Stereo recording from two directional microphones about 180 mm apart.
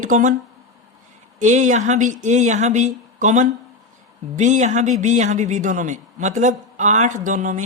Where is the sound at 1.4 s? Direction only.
40° right (ahead or behind).